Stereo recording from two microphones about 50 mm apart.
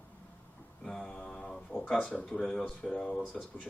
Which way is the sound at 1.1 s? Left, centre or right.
Centre.